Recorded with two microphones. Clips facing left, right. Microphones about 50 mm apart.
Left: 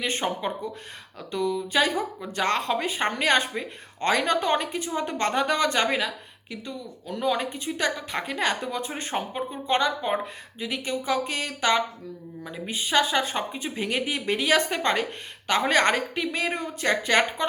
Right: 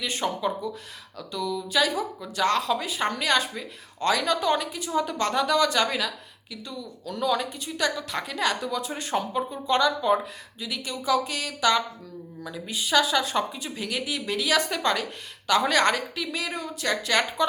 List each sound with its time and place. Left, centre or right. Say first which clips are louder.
0.0 s a woman's voice: even; left
12.5 s a woman's voice: right 1 dB; left